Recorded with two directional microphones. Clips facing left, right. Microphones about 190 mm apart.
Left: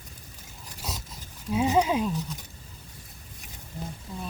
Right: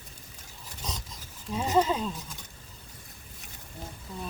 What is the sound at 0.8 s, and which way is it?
Dog, 10° left (ahead or behind).